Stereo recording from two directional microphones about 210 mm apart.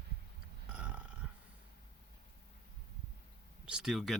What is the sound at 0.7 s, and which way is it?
Burping, 5° right (ahead or behind).